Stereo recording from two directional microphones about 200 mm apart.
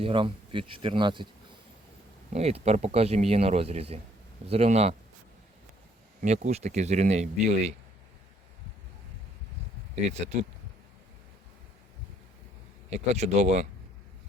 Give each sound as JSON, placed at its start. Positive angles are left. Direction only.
{"t": 0.0, "sound": "speech", "side_deg": -25}
{"t": 2.3, "sound": "speech", "side_deg": -30}
{"t": 6.2, "sound": "speech", "side_deg": -35}
{"t": 9.9, "sound": "speech", "side_deg": -35}
{"t": 12.9, "sound": "speech", "side_deg": -35}